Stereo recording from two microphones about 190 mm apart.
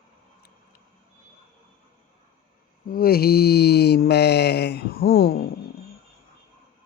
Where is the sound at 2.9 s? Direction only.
50° left (ahead or behind).